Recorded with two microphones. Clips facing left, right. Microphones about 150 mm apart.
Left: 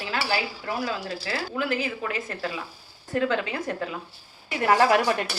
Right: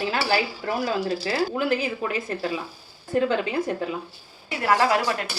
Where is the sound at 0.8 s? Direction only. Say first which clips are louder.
Right 5 dB; 30° right (ahead or behind).